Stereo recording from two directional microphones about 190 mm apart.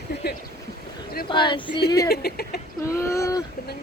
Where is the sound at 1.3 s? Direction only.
25° left (ahead or behind).